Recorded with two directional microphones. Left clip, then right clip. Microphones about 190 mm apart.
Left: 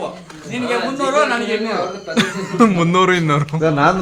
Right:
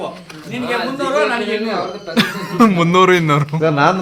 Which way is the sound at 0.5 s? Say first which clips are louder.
Left 1 dB; 5° left (ahead or behind).